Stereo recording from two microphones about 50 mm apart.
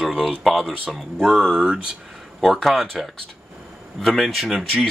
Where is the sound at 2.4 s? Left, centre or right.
Centre.